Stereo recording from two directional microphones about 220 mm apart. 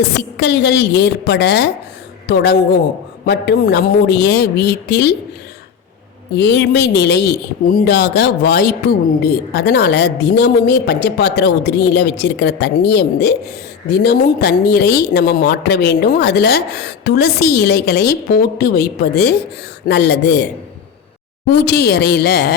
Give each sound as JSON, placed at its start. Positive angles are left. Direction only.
{"t": 0.0, "sound": "speech", "side_deg": 50}
{"t": 6.3, "sound": "speech", "side_deg": 50}
{"t": 21.6, "sound": "speech", "side_deg": 50}